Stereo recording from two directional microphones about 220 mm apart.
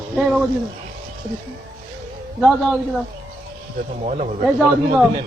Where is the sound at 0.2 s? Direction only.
5° right (ahead or behind).